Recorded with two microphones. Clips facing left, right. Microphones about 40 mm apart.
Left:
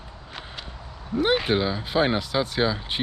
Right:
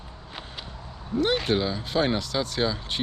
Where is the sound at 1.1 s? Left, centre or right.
Centre.